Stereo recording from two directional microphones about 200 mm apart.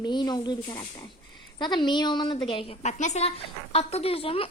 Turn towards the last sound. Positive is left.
turn(degrees=30)  # may be behind; listen again after turning